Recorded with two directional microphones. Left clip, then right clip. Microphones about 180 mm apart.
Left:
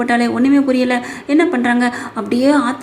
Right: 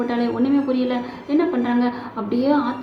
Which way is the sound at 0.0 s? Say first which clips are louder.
Left 7 dB; 30° left (ahead or behind).